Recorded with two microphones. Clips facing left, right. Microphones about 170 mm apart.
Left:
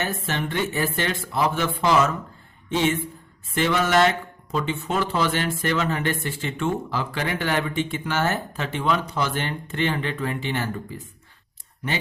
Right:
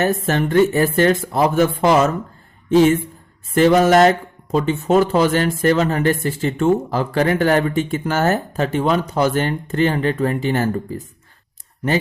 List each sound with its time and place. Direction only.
0.0 s a woman's voice: 45° right (ahead or behind)